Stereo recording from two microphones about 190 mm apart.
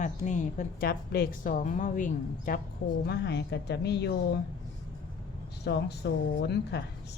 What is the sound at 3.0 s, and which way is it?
Speech, 65° left (ahead or behind).